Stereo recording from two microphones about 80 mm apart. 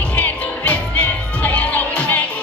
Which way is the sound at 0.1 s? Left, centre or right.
Left.